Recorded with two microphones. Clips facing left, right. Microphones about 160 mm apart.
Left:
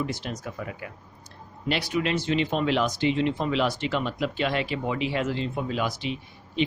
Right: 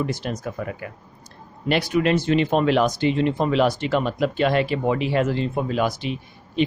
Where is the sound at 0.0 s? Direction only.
50° right (ahead or behind).